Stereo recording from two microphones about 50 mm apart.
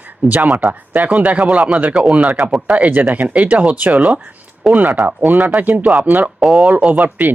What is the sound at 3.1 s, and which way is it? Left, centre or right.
Speech, right.